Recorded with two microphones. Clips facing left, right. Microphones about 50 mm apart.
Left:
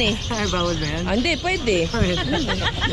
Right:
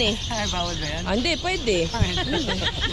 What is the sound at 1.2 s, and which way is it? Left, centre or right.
Speech, left.